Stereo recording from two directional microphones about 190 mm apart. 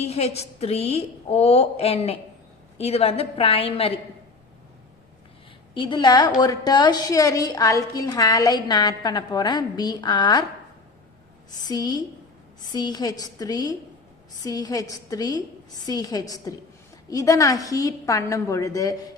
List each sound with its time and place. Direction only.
0.0 s a woman's voice: 35° left (ahead or behind)
5.7 s a woman's voice: 25° left (ahead or behind)
11.5 s a woman's voice: 20° left (ahead or behind)